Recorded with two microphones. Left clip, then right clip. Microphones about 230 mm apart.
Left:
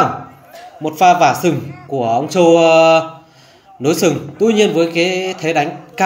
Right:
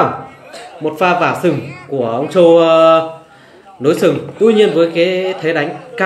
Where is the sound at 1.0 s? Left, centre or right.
Left.